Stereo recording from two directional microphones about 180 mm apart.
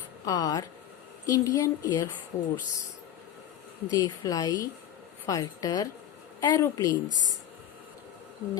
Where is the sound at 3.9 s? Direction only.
20° left (ahead or behind).